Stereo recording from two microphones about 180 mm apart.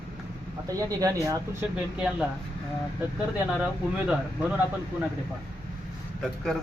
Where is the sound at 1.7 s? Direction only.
5° right (ahead or behind).